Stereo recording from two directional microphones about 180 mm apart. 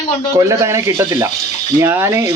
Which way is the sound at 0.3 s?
15° right (ahead or behind).